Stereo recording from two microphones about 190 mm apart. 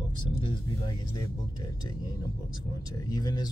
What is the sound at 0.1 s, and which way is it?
Speech, 25° left (ahead or behind).